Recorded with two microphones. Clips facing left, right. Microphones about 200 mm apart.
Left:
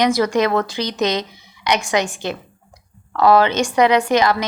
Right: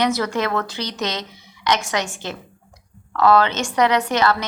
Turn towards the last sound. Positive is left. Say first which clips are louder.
# left 3 dB
turn(degrees=10)  # may be behind; listen again after turning